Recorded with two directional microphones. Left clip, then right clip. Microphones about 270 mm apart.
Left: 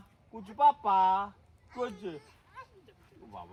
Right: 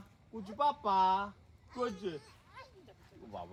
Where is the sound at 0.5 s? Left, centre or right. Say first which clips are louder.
Left 6 dB; left.